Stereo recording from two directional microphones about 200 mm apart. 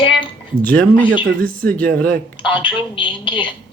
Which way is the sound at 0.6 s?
10° left (ahead or behind).